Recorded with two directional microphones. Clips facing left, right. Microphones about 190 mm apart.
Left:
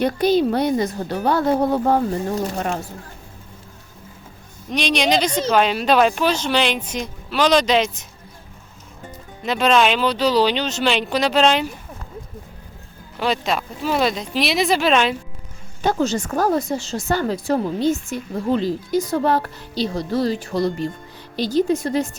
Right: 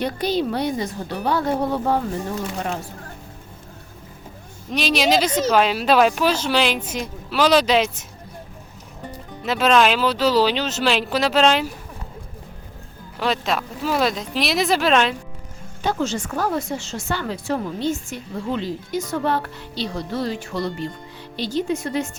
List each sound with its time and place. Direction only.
0.0 s a woman's voice: 45° left (ahead or behind)
4.7 s speech: 5° right (ahead or behind)
9.4 s speech: 5° right (ahead or behind)
13.1 s speech: centre (ahead or behind)
15.8 s speech: 45° left (ahead or behind)